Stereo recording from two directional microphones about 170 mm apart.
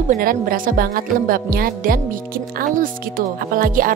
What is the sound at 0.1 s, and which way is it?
Speech, 55° right (ahead or behind).